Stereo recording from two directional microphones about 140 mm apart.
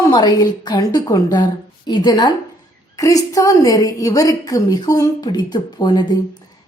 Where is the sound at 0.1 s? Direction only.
30° left (ahead or behind).